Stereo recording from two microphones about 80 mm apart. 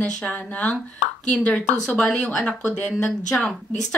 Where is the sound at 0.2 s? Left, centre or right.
Centre.